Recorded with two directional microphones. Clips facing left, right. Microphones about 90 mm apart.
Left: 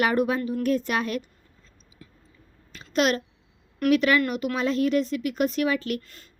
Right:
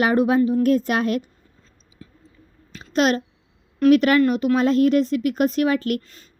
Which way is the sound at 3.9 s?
40° right (ahead or behind).